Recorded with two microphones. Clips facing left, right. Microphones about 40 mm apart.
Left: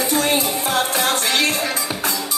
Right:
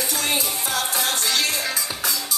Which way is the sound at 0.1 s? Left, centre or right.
Left.